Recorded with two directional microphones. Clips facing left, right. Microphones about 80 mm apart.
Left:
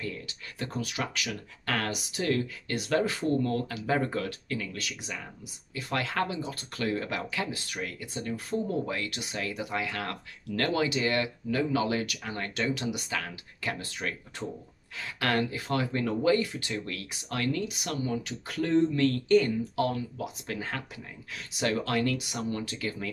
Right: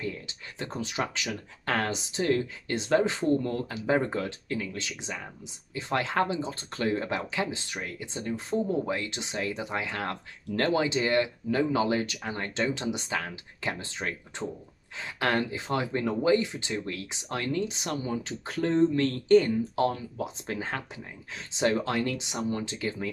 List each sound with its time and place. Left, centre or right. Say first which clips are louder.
0.0 s speech: right 2 dB; right